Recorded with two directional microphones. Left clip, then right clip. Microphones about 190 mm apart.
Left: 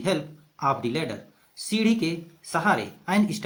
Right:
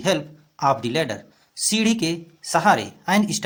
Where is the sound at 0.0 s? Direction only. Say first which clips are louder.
Right 5 dB; 40° right (ahead or behind).